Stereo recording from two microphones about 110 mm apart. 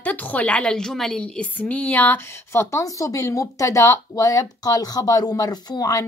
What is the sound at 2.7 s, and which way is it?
Speech, 30° left (ahead or behind).